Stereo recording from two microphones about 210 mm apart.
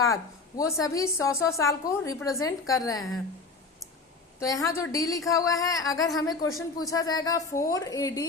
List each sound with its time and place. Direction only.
0.0 s a woman's voice: 15° left (ahead or behind)
4.4 s a woman's voice: 15° left (ahead or behind)